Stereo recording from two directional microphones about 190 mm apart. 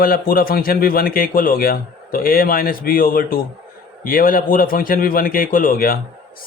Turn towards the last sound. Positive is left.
turn(degrees=50)  # may be behind; listen again after turning